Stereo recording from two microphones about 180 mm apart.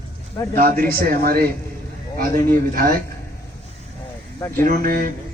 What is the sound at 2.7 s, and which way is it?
Speech, 55° right (ahead or behind).